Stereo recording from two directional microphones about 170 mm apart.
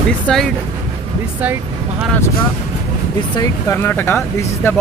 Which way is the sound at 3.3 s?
20° left (ahead or behind).